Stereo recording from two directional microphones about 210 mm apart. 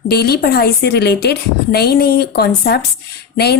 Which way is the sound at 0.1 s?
50° left (ahead or behind).